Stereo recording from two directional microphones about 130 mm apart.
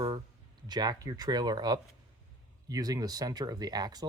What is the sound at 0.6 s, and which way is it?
Speech, 30° right (ahead or behind).